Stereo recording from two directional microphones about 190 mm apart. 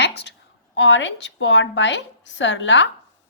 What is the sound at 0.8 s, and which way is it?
A woman's voice, 75° left (ahead or behind).